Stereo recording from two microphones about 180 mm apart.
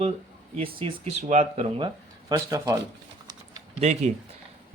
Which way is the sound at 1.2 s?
40° right (ahead or behind).